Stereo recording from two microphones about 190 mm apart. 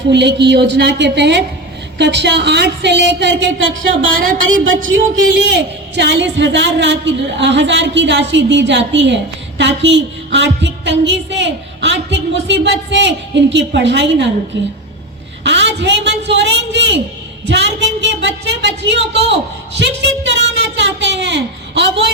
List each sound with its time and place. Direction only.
0.1 s a woman's voice: 65° right (ahead or behind)
4.4 s a woman's voice: 90° right
4.9 s a man's voice: 65° right (ahead or behind)
15.4 s a man's voice: 65° right (ahead or behind)
17.5 s a sound: 65° right (ahead or behind)